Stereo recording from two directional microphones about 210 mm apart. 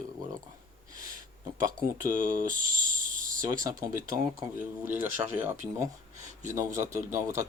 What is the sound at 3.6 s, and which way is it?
Speech, 15° right (ahead or behind).